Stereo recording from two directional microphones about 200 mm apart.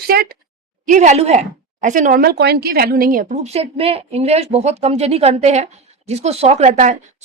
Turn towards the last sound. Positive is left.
turn(degrees=-40)  # may be behind; listen again after turning